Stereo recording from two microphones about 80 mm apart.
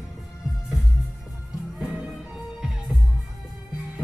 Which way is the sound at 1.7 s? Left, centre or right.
Centre.